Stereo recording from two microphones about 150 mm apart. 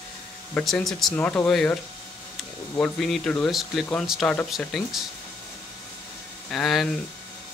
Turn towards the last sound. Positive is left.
turn(degrees=0)  # may be behind; listen again after turning